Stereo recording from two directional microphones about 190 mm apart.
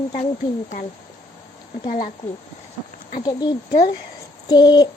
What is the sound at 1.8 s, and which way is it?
Speech, 45° left (ahead or behind).